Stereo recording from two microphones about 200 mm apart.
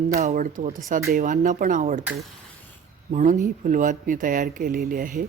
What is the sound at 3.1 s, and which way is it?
Speech, 40° right (ahead or behind).